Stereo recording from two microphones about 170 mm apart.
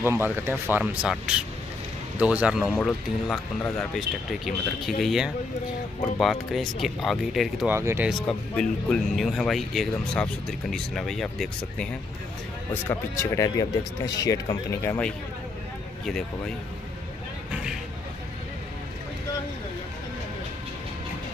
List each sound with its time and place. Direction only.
0.0 s speech: 15° right (ahead or behind)
7.7 s speech: 15° right (ahead or behind)
8.1 s speech: 5° left (ahead or behind)
12.8 s speech: 15° left (ahead or behind)